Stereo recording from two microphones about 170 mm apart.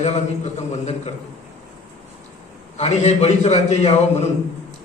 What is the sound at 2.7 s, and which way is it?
A man's voice, 40° left (ahead or behind).